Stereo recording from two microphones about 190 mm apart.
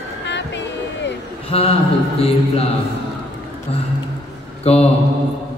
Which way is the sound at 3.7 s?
35° left (ahead or behind).